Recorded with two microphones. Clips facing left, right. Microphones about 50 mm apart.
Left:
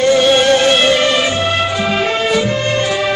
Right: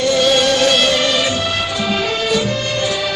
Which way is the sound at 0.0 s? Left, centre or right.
Left.